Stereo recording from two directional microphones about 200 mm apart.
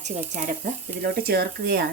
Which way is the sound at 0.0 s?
40° right (ahead or behind).